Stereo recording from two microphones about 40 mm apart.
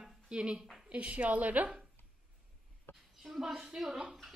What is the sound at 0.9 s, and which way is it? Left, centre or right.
Speech, right.